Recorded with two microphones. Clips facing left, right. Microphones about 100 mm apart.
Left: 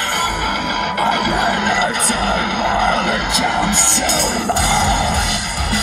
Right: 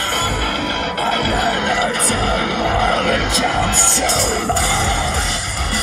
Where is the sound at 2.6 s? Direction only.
20° left (ahead or behind).